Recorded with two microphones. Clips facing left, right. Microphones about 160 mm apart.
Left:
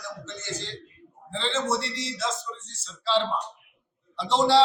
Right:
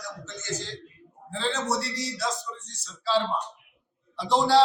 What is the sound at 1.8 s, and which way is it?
Speech, 25° left (ahead or behind).